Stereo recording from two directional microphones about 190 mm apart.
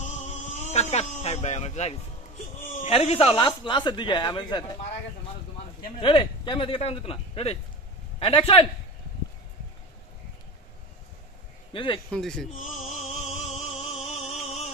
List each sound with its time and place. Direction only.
0.0 s a sound: 35° left (ahead or behind)
2.8 s speech: 35° left (ahead or behind)
5.9 s speech: 25° left (ahead or behind)
11.7 s speech: 25° left (ahead or behind)
12.1 s speech: 5° left (ahead or behind)
12.5 s music: 35° left (ahead or behind)